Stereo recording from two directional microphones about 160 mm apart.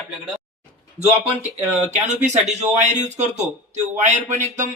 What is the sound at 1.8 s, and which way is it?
Speech, 45° right (ahead or behind).